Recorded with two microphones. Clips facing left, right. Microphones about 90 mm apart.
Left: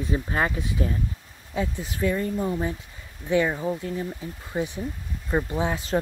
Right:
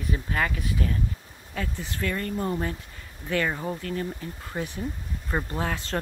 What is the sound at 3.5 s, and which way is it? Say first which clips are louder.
Speech: left 3 dB; centre (ahead or behind).